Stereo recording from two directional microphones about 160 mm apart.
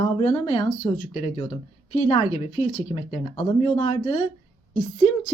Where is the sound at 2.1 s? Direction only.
35° left (ahead or behind).